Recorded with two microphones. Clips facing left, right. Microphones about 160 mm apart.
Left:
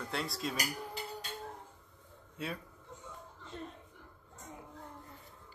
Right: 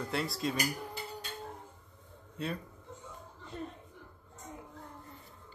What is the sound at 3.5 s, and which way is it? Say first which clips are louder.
Speech: right 3 dB; 5° right (ahead or behind).